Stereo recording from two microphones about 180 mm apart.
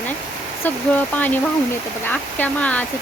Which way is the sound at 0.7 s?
10° left (ahead or behind).